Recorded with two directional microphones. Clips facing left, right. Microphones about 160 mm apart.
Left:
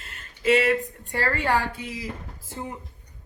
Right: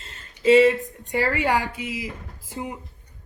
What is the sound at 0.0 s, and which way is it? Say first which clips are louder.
A woman's voice: right 4 dB; 25° right (ahead or behind).